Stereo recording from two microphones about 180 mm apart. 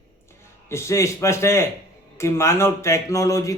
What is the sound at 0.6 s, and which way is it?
Speech, 15° left (ahead or behind).